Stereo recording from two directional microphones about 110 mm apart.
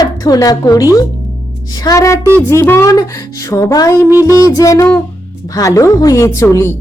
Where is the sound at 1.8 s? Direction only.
30° left (ahead or behind).